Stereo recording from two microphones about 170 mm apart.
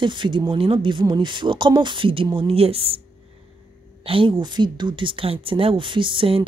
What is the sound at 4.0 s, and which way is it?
A woman's voice, 30° right (ahead or behind).